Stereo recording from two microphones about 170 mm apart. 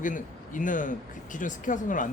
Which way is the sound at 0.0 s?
50° left (ahead or behind).